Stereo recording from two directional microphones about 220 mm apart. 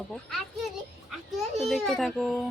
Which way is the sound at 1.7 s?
Centre (ahead or behind).